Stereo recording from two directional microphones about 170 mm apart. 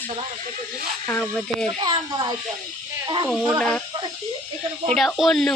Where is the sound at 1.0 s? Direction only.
10° left (ahead or behind).